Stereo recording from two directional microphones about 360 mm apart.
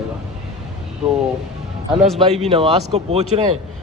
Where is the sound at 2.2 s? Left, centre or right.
Centre.